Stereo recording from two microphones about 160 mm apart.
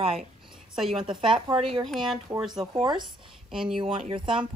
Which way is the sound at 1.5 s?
35° right (ahead or behind).